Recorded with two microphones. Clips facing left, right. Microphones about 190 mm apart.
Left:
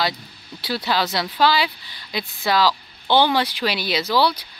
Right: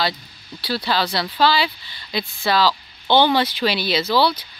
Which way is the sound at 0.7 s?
20° left (ahead or behind).